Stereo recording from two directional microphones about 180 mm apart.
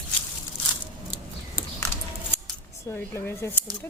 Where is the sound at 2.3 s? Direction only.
10° left (ahead or behind).